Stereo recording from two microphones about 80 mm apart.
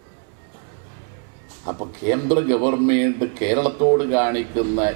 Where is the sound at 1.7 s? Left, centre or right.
Centre.